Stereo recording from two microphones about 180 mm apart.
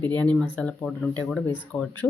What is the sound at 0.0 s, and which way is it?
A woman's voice, 10° left (ahead or behind).